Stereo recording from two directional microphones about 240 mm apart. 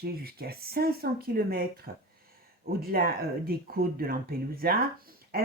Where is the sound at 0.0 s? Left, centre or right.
Right.